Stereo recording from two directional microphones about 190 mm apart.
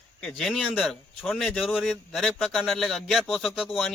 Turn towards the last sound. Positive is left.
turn(degrees=0)  # may be behind; listen again after turning